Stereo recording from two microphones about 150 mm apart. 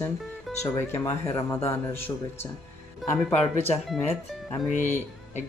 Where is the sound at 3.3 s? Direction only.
45° left (ahead or behind).